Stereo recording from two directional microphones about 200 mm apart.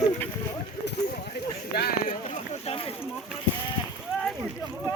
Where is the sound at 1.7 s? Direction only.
45° left (ahead or behind).